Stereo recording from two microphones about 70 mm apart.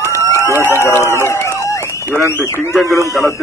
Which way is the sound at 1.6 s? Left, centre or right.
Left.